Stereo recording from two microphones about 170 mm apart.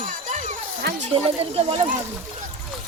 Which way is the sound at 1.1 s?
35° right (ahead or behind).